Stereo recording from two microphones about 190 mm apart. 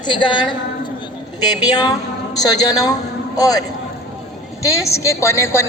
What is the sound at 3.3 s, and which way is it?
Speech, 20° left (ahead or behind).